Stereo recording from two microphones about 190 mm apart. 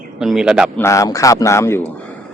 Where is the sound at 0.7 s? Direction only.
15° left (ahead or behind).